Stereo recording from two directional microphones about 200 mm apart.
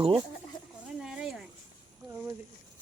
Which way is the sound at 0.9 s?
5° right (ahead or behind).